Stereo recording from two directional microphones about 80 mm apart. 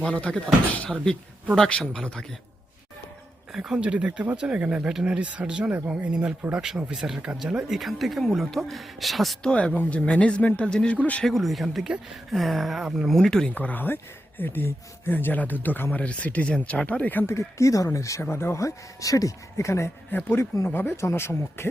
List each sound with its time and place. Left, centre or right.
0.0 s speech: centre
1.5 s speech: centre
3.5 s speech: centre
9.5 s speech: centre
11.3 s speech: centre
13.1 s speech: centre
17.2 s speech: left
20.1 s speech: left